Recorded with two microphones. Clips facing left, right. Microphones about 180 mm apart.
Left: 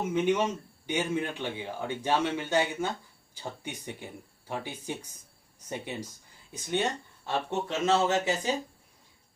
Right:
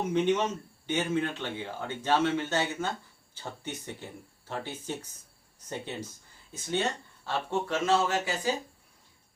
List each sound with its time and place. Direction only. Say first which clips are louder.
0.1 s speech: even; 10° left (ahead or behind)